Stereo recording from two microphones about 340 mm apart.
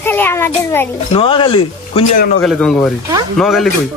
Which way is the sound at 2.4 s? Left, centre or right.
Centre.